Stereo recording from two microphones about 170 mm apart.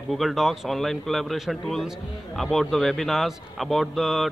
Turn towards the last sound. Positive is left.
turn(degrees=0)  # may be behind; listen again after turning